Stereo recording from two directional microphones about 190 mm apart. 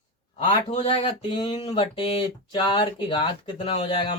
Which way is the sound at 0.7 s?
30° left (ahead or behind).